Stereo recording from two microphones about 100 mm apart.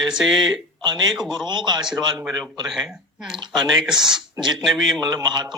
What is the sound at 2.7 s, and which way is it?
Speech, 5° right (ahead or behind).